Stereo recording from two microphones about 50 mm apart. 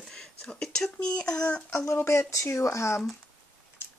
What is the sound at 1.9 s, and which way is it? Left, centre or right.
Speech, left.